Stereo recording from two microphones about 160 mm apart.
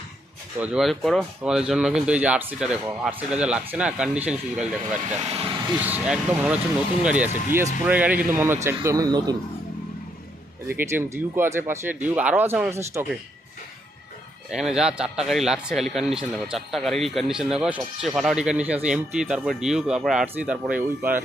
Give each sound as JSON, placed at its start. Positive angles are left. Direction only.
{"t": 0.6, "sound": "speech", "side_deg": -5}
{"t": 5.8, "sound": "speech", "side_deg": -10}
{"t": 10.7, "sound": "speech", "side_deg": -15}
{"t": 14.5, "sound": "a man's voice", "side_deg": -5}